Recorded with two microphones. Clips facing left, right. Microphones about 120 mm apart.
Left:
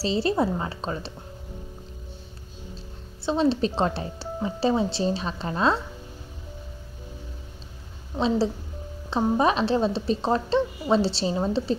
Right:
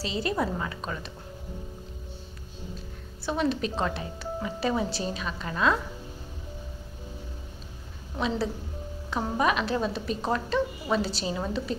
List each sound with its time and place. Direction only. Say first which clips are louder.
0.0 s a woman's voice: left 5 dB; 30° left (ahead or behind)
3.3 s a woman's voice: left 5 dB; 30° left (ahead or behind)
9.1 s a woman's voice: left 4 dB; 30° left (ahead or behind)